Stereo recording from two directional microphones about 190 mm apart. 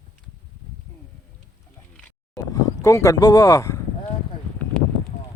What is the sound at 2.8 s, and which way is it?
Speech, 15° left (ahead or behind).